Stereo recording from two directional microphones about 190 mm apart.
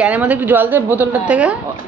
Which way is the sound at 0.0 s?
10° right (ahead or behind).